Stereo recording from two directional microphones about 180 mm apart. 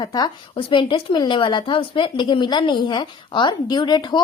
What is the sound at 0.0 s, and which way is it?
A woman's voice, 20° left (ahead or behind).